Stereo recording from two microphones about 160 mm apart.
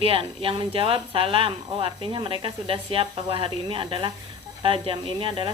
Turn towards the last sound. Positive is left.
turn(degrees=-35)  # may be behind; listen again after turning